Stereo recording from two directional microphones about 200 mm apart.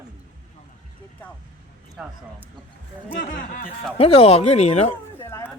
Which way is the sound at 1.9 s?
5° right (ahead or behind).